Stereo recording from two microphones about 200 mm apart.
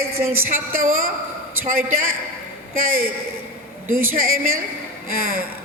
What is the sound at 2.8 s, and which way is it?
Speech, 45° right (ahead or behind).